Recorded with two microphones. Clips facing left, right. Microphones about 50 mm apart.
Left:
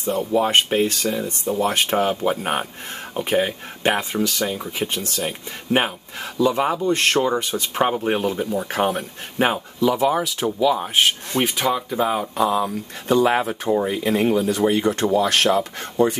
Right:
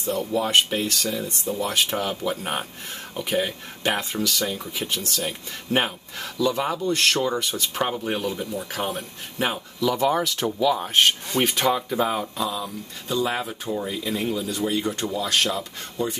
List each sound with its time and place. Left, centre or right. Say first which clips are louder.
0.0 s speech: left 4 dB; left
6.3 s speech: left 4 dB; left
9.8 s speech: left 3 dB; centre
12.4 s speech: left 8 dB; left